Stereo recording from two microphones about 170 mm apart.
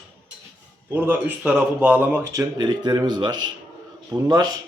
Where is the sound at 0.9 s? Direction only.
10° right (ahead or behind).